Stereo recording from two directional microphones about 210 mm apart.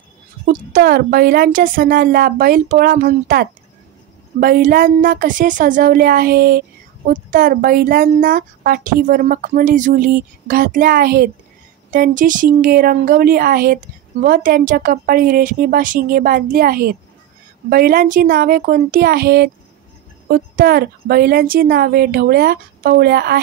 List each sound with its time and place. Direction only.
0.5 s a woman's voice: 45° right (ahead or behind)